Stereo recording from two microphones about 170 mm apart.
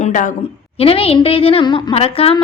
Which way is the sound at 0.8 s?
35° left (ahead or behind).